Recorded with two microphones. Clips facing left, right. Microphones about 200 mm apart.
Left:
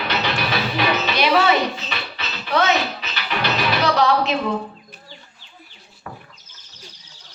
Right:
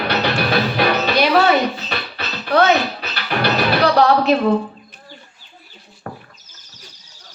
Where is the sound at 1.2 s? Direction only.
40° right (ahead or behind).